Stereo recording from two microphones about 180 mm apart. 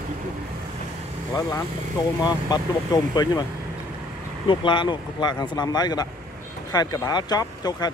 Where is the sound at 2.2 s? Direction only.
20° left (ahead or behind).